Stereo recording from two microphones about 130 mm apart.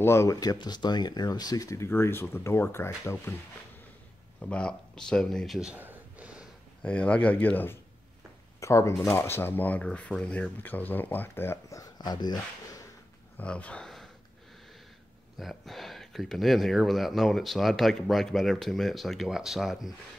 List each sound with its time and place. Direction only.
0.0 s speech: 20° left (ahead or behind)
4.4 s speech: 5° left (ahead or behind); by 6.4 s 10° right (ahead or behind)
6.8 s speech: 10° left (ahead or behind); by 12.8 s 30° left (ahead or behind)
13.4 s speech: 10° left (ahead or behind)
15.3 s speech: centre (ahead or behind)